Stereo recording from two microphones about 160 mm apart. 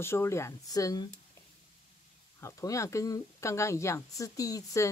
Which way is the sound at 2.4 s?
20° left (ahead or behind).